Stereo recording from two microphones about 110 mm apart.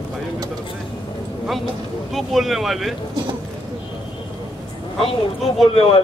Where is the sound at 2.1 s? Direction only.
Centre (ahead or behind).